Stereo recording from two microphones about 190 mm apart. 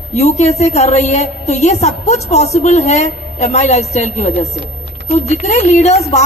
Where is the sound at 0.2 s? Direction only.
35° left (ahead or behind).